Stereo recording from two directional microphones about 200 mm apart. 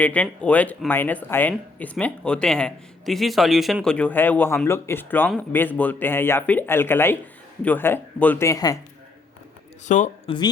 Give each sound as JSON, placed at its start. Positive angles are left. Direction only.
{"t": 0.0, "sound": "speech", "side_deg": 5}
{"t": 9.8, "sound": "speech", "side_deg": 35}
{"t": 10.2, "sound": "speech", "side_deg": 20}